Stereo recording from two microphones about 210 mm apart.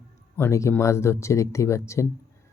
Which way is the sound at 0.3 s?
10° left (ahead or behind).